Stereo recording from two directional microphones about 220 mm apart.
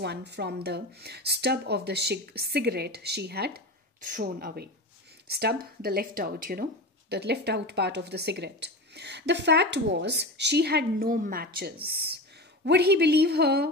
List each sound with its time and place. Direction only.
0.0 s speech: 50° right (ahead or behind)